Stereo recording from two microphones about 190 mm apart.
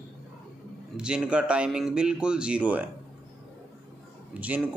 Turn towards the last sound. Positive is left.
turn(degrees=-10)  # may be behind; listen again after turning